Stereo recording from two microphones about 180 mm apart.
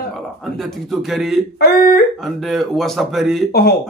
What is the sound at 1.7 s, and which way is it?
Speech, 60° left (ahead or behind).